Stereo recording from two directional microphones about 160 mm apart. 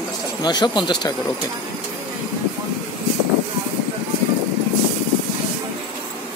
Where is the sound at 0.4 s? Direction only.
25° left (ahead or behind).